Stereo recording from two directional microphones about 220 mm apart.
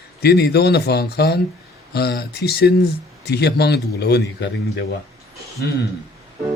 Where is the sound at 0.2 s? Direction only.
45° left (ahead or behind).